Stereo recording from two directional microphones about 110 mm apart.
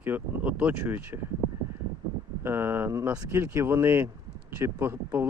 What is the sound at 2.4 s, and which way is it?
Speech, 20° right (ahead or behind).